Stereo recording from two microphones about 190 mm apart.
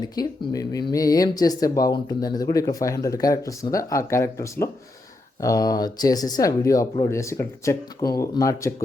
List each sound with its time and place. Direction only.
0.0 s speech: 20° left (ahead or behind)